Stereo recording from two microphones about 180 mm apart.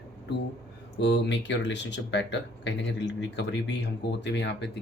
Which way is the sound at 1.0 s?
75° left (ahead or behind).